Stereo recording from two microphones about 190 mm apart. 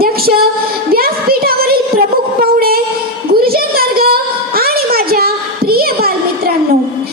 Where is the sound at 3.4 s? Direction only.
50° right (ahead or behind).